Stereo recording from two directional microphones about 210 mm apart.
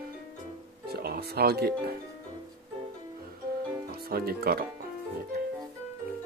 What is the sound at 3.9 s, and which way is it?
Speech, 45° right (ahead or behind).